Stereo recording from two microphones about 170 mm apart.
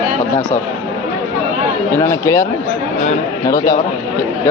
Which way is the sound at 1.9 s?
15° left (ahead or behind).